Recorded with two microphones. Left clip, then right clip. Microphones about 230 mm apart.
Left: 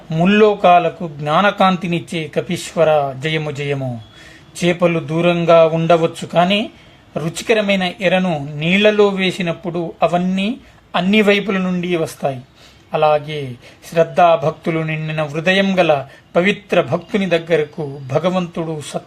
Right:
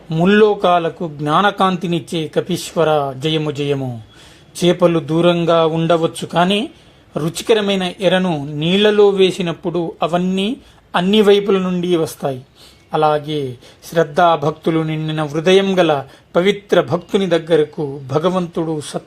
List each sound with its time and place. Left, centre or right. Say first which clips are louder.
0.1 s speech: right 1 dB; right
4.6 s speech: right 2 dB; right